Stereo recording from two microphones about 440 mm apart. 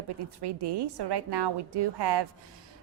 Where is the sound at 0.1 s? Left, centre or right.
Right.